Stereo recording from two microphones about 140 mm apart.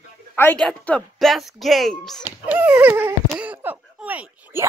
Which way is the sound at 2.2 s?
10° right (ahead or behind).